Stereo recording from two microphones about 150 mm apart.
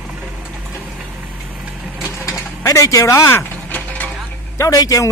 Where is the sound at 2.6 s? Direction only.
20° left (ahead or behind).